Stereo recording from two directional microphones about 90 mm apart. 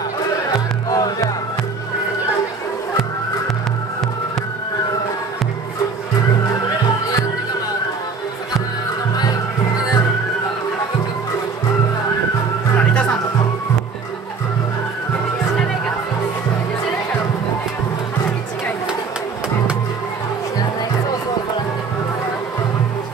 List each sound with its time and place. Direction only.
0.8 s music: 40° left (ahead or behind)
12.7 s music: 10° left (ahead or behind)